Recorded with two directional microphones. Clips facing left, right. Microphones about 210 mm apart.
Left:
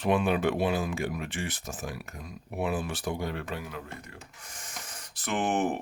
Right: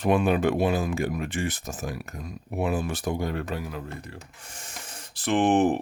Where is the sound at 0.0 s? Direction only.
45° right (ahead or behind).